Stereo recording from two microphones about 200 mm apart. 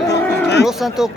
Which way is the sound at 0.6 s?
Centre (ahead or behind).